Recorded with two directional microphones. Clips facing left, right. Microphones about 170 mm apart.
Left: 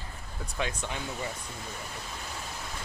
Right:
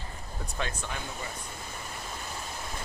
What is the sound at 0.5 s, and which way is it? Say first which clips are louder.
Speech: left 2 dB; 15° left (ahead or behind).